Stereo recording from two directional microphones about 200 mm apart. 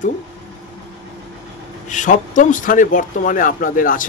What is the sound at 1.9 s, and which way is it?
Speech, 40° left (ahead or behind).